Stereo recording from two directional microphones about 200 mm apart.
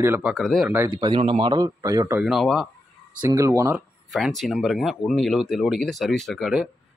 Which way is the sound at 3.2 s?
15° right (ahead or behind).